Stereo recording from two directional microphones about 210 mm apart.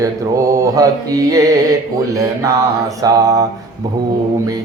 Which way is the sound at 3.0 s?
15° right (ahead or behind).